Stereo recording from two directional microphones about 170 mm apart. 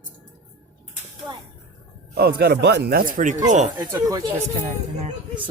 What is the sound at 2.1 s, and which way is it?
Speech, 70° right (ahead or behind).